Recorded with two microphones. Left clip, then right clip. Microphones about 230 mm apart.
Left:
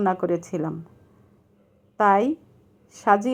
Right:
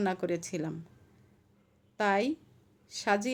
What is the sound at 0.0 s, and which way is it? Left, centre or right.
Speech, centre.